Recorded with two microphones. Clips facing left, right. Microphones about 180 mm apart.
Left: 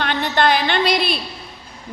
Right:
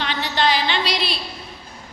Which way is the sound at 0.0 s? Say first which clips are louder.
Left 3 dB; 55° left (ahead or behind).